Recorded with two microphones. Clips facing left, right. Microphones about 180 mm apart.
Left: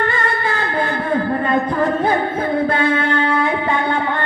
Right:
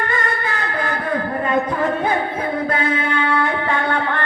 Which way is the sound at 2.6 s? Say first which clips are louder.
Left 3 dB; 35° left (ahead or behind).